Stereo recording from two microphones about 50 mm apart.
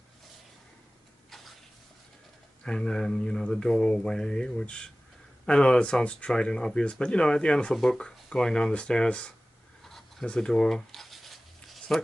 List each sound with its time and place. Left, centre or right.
2.6 s speech: centre
9.8 s a sound: centre
10.2 s writing: centre